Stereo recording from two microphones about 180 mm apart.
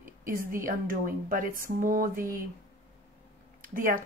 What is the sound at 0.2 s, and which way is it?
Speech, 50° right (ahead or behind).